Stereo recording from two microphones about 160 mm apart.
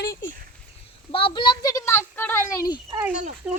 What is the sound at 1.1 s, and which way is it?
Speech, 35° left (ahead or behind).